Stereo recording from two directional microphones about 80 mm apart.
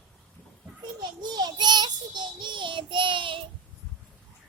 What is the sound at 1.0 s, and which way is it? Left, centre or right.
Child singing, right.